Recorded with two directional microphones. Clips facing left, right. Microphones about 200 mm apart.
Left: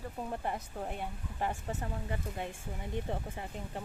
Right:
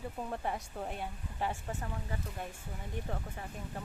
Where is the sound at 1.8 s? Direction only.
25° left (ahead or behind).